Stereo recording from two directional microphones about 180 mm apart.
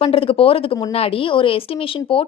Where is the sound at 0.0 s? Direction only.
30° left (ahead or behind).